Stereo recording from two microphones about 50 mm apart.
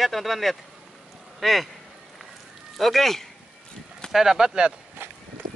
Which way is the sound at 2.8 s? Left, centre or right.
Centre.